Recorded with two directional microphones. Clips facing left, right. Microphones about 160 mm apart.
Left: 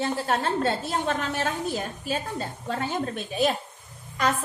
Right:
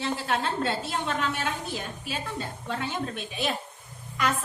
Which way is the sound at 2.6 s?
40° left (ahead or behind).